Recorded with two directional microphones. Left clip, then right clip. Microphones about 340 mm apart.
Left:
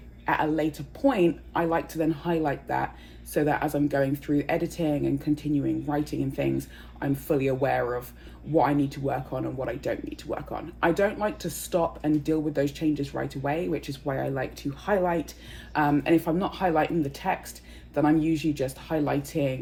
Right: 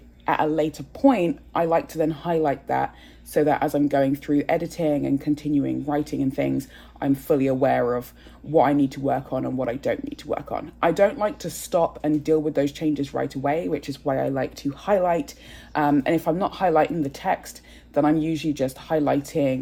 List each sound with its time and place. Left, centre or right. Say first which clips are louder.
0.3 s speech: right 4 dB; right